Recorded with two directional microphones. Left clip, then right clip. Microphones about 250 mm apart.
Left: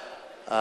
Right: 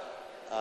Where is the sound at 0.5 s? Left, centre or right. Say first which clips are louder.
Left 9 dB; left.